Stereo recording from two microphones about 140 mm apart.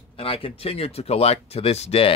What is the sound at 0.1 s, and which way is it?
Speech, 40° left (ahead or behind).